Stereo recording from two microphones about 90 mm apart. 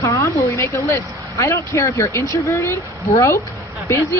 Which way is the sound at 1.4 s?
30° left (ahead or behind).